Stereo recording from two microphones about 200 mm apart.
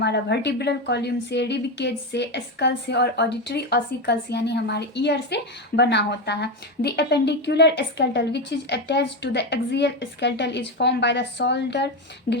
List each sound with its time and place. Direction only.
0.0 s a woman's voice: 55° left (ahead or behind)